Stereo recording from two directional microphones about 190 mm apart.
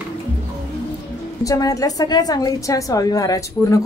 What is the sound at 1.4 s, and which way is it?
A woman's voice, 20° left (ahead or behind).